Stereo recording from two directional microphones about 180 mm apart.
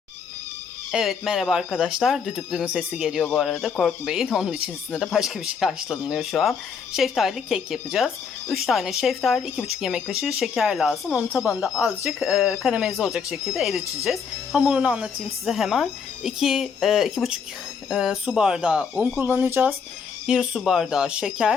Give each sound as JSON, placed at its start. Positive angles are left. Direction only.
{"t": 0.9, "sound": "speech", "side_deg": 0}
{"t": 20.2, "sound": "speech", "side_deg": -5}